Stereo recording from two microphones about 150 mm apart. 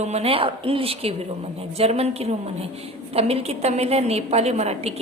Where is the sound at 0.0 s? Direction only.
45° right (ahead or behind).